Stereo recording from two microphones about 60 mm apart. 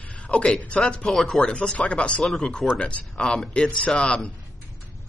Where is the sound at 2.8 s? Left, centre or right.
Centre.